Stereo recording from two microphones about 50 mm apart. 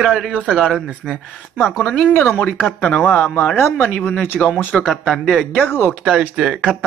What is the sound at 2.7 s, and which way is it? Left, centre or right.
Speech, left.